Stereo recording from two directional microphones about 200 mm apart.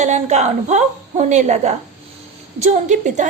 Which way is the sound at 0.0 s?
35° right (ahead or behind).